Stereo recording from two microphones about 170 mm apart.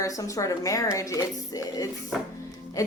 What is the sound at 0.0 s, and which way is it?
A woman's voice, 20° left (ahead or behind).